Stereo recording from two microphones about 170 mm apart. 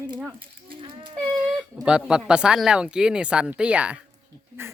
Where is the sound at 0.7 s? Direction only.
30° right (ahead or behind).